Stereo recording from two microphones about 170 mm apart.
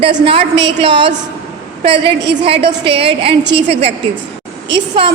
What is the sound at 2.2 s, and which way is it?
Speech, 90° right.